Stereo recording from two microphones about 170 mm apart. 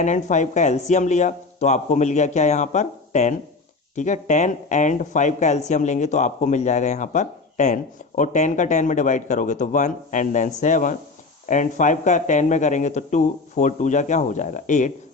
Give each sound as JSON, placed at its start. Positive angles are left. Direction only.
{"t": 0.0, "sound": "speech", "side_deg": 45}